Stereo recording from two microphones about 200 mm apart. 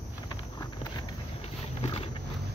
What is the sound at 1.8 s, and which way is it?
Wild animals, 30° left (ahead or behind).